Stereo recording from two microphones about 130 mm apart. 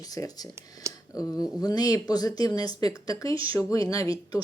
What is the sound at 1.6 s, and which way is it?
Speech, 30° left (ahead or behind).